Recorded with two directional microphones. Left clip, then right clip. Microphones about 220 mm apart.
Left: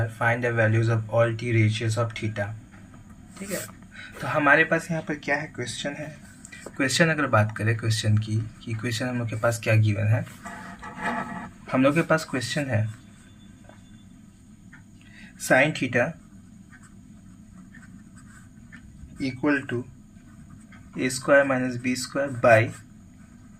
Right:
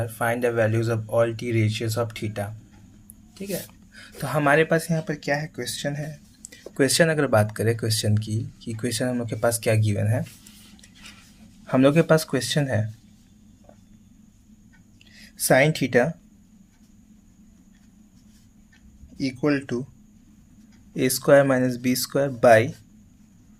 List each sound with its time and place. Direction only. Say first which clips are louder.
0.2 s speech: right 1 dB; 50° right (ahead or behind)
3.9 s speech: left 1 dB; 50° right (ahead or behind)
6.7 s speech: right 3 dB; 40° right (ahead or behind)
11.7 s speech: right 3 dB; 45° right (ahead or behind)
15.4 s speech: right 1 dB; 50° right (ahead or behind)
19.2 s speech: right 1 dB; 55° right (ahead or behind)
20.9 s speech: right 3 dB; 50° right (ahead or behind)